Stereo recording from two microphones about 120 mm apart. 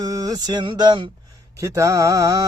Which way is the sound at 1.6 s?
25° right (ahead or behind).